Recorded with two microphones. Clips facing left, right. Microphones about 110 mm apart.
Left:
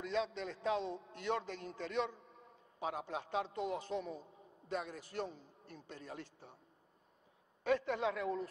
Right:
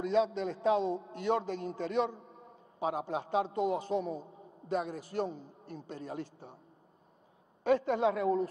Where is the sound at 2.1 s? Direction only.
25° right (ahead or behind).